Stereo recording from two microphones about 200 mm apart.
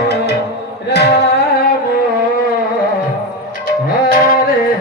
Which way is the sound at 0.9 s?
55° left (ahead or behind).